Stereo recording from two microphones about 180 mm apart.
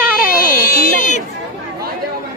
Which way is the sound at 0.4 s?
55° left (ahead or behind).